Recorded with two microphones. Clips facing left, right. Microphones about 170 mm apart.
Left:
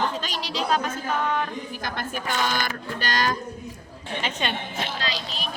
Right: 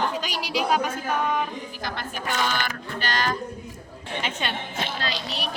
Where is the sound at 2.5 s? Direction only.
40° left (ahead or behind).